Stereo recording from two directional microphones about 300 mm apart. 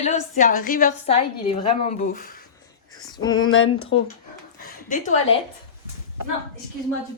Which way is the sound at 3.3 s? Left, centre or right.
Left.